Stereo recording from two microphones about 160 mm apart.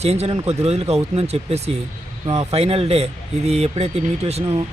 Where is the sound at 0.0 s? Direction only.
40° right (ahead or behind).